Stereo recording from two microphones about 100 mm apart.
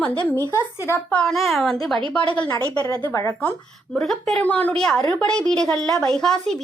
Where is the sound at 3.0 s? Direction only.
20° left (ahead or behind).